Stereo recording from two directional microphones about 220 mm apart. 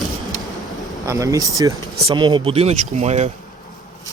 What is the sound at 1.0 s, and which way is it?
Speech, 15° right (ahead or behind).